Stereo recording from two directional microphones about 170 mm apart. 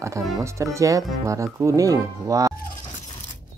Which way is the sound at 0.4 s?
15° right (ahead or behind).